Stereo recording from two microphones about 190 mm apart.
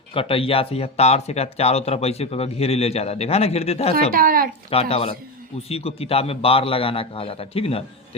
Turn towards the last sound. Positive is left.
turn(degrees=30)  # may be behind; listen again after turning